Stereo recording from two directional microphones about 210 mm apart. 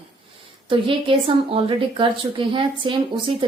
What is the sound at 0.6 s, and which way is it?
A woman's voice, 25° right (ahead or behind).